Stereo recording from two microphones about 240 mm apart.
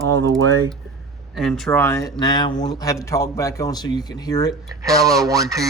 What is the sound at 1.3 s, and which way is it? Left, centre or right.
A man's voice, centre.